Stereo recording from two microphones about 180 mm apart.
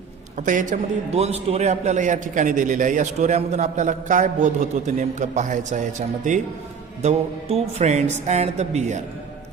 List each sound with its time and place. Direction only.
0.4 s a man's voice: 45° right (ahead or behind)
7.0 s music: 40° right (ahead or behind)